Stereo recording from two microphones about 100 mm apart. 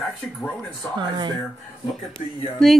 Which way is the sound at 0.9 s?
45° right (ahead or behind).